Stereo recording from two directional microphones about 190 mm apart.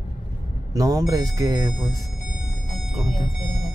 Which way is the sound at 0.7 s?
20° right (ahead or behind).